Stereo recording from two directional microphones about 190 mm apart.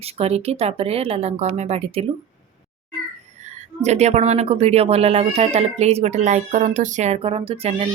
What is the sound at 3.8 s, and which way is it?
Speech, 35° right (ahead or behind).